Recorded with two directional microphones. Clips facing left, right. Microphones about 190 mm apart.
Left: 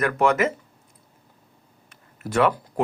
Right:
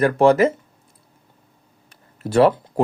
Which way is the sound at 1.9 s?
30° right (ahead or behind).